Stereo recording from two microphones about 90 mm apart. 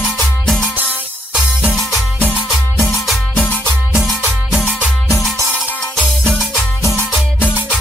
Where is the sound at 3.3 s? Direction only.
20° left (ahead or behind).